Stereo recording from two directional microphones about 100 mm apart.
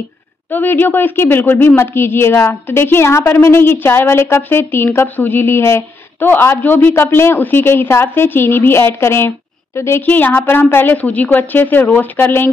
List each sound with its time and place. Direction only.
0.5 s a woman's voice: 20° left (ahead or behind)